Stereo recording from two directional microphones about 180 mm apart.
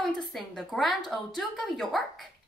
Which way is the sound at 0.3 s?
Centre (ahead or behind).